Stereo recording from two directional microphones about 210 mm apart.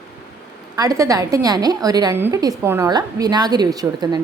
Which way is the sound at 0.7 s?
15° right (ahead or behind).